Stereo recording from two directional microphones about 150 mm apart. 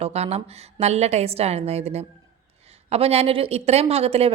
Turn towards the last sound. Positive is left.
turn(degrees=-40)  # may be behind; listen again after turning